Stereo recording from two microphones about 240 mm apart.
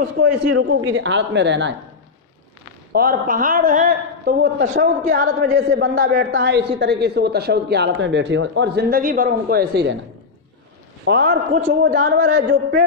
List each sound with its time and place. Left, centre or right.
0.0 s a man's voice: right
0.5 s a woman's voice: right
2.9 s a man's voice: right
11.1 s a woman's voice: right